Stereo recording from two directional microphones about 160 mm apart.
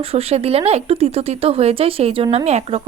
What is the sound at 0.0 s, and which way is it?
Speech, 40° right (ahead or behind).